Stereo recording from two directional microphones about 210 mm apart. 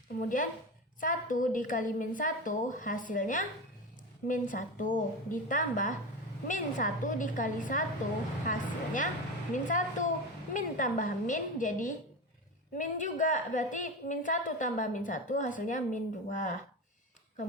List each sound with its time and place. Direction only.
0.2 s a woman's voice: 40° left (ahead or behind)